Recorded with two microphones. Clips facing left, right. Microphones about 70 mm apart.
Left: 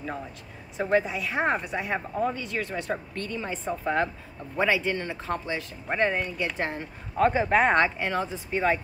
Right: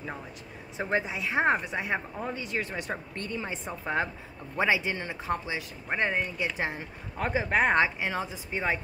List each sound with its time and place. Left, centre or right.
0.7 s a woman's voice: right